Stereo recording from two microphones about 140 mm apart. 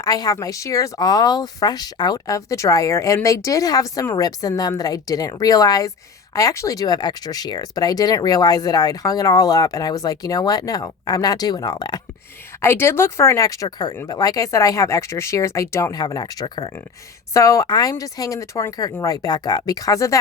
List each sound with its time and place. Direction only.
0.0 s speech: 25° left (ahead or behind)
12.6 s speech: 15° left (ahead or behind)